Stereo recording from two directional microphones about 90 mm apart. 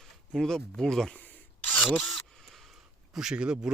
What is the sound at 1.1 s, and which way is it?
Rub, 20° left (ahead or behind).